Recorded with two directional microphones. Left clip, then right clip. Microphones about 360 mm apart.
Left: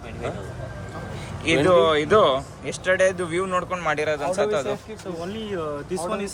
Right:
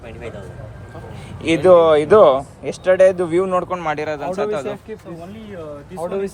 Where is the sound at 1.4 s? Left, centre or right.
Centre.